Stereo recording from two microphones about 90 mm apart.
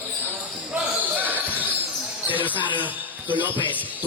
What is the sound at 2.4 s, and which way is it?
Speech, 20° right (ahead or behind).